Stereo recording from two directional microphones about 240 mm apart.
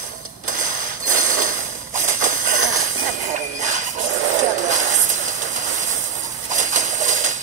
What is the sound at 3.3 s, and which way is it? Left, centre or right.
Jingle bell, right.